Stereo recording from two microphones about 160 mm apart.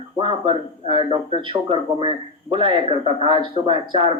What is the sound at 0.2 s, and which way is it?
Speech, 35° right (ahead or behind).